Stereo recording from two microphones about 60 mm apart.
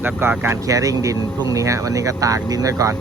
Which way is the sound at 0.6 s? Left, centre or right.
Right.